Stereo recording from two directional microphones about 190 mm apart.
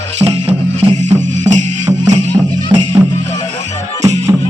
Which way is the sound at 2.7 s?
25° right (ahead or behind).